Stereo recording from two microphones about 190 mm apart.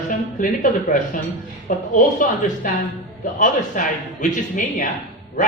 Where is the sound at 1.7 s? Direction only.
45° left (ahead or behind).